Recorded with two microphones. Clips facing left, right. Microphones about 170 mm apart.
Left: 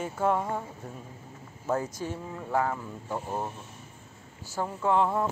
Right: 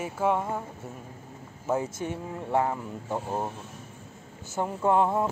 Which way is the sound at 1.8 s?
20° right (ahead or behind).